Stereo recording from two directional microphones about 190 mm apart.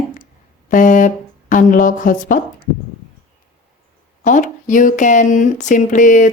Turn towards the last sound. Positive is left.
turn(degrees=40)  # may be behind; listen again after turning